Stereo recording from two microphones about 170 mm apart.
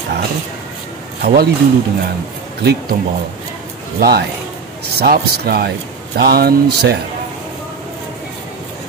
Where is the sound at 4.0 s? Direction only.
70° right (ahead or behind).